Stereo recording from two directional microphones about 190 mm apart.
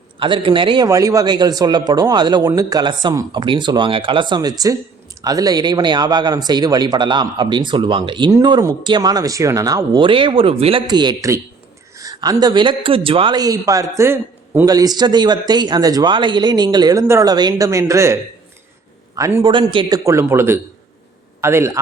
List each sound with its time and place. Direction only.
0.2 s a man's voice: 25° right (ahead or behind)